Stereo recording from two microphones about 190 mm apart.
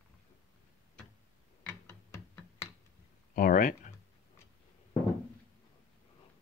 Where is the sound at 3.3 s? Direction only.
45° left (ahead or behind).